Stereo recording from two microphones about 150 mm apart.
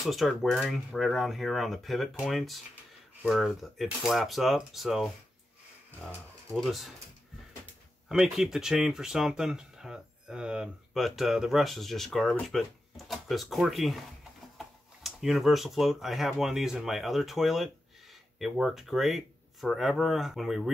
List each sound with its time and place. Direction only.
0.0 s speech: centre (ahead or behind)
8.1 s speech: 5° right (ahead or behind)